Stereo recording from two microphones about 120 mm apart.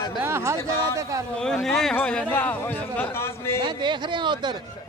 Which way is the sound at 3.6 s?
40° right (ahead or behind).